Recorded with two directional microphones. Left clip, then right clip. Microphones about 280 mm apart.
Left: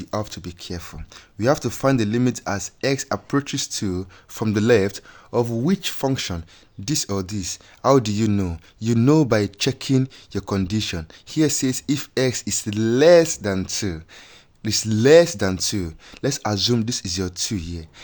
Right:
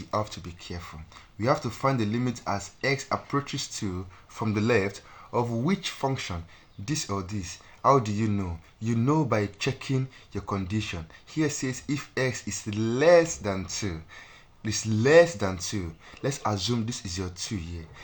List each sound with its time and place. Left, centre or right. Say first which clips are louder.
0.0 s speech: left 2 dB; left